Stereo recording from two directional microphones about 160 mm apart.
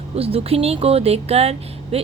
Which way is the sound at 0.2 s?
40° right (ahead or behind).